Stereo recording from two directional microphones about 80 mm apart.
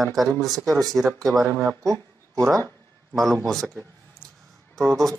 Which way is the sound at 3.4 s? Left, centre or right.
Centre.